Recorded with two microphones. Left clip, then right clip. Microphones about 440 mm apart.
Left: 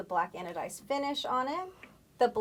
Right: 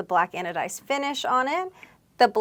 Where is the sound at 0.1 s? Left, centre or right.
Right.